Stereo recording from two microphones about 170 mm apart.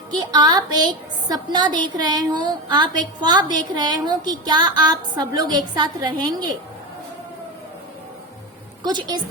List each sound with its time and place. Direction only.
0.2 s a woman's voice: 25° right (ahead or behind)
8.8 s a woman's voice: 25° right (ahead or behind)